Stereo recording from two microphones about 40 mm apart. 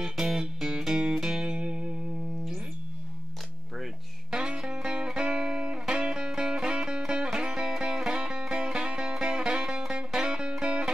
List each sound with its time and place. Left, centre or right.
0.0 s music: centre
4.3 s music: centre